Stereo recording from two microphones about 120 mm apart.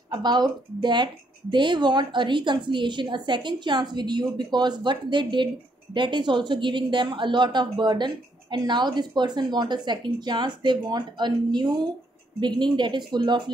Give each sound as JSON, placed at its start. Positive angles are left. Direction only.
{"t": 0.1, "sound": "a woman's voice", "side_deg": -40}